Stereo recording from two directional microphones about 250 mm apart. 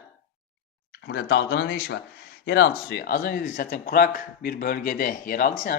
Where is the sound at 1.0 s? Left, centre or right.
Left.